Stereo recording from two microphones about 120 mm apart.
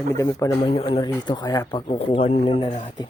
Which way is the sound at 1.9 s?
50° left (ahead or behind).